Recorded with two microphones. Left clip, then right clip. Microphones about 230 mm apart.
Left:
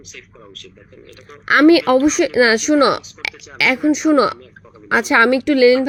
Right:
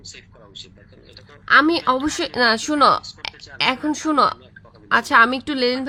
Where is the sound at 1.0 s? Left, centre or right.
Centre.